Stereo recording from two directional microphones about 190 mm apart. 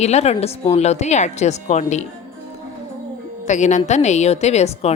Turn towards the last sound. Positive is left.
turn(degrees=35)  # may be behind; listen again after turning